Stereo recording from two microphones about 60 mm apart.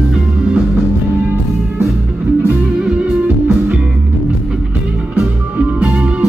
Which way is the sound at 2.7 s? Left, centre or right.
Centre.